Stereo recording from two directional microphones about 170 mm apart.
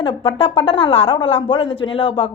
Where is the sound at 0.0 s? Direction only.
30° left (ahead or behind).